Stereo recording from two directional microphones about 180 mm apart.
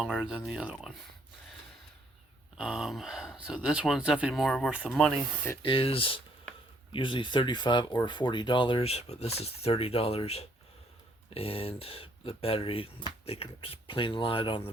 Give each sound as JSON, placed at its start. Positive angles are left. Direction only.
{"t": 0.0, "sound": "speech", "side_deg": -5}
{"t": 2.6, "sound": "speech", "side_deg": -5}
{"t": 5.6, "sound": "speech", "side_deg": 30}